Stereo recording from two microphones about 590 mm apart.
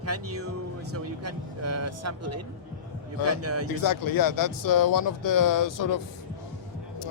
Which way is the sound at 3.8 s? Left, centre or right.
Left.